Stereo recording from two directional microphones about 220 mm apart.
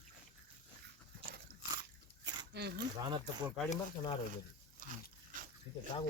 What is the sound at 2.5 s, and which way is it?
Speech, 50° right (ahead or behind).